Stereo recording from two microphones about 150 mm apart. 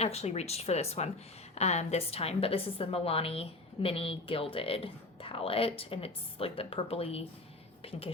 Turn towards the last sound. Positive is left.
turn(degrees=40)  # may be behind; listen again after turning